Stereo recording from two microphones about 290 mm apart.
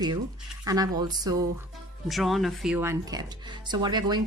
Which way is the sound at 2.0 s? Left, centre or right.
Centre.